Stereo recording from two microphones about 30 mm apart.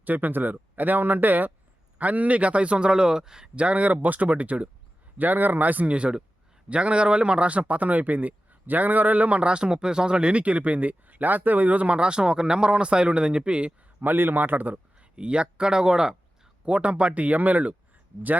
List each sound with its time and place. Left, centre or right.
0.0 s speech: right
2.0 s a man's voice: right
3.5 s a man's voice: right
5.1 s speech: right
5.9 s a man's voice: right
7.6 s a man's voice: right
9.3 s a man's voice: right
10.4 s a man's voice: right
11.9 s a man's voice: right
14.0 s speech: right
14.9 s speech: right
16.6 s speech: right